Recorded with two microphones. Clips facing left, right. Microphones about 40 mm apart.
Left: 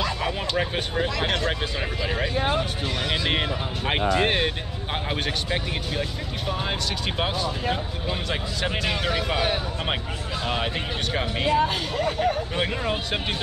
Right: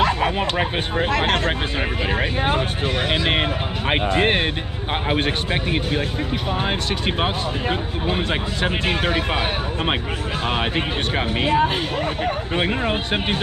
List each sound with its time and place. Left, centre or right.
0.0 s bow-wow: right
1.0 s speech: right
2.0 s speech: right